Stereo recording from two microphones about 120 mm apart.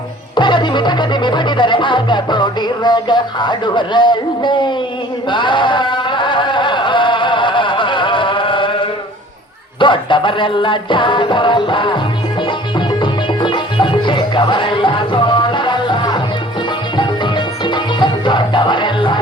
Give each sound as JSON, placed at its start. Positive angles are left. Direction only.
{"t": 0.3, "sound": "music", "side_deg": 40}
{"t": 5.3, "sound": "a sound", "side_deg": 40}
{"t": 9.8, "sound": "music", "side_deg": 40}